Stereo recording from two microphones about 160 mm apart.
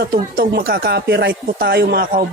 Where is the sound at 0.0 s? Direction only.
80° right.